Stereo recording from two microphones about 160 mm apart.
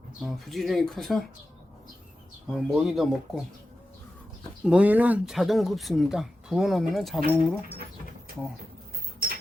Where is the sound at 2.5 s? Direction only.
Centre (ahead or behind).